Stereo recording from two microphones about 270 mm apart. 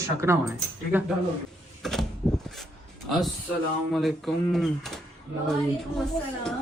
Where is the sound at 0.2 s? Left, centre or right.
Centre.